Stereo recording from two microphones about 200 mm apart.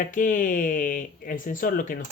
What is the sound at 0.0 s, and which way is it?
Speech, 40° left (ahead or behind).